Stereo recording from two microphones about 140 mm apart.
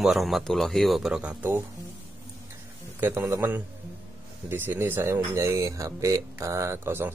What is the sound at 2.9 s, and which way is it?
Speech, 15° right (ahead or behind).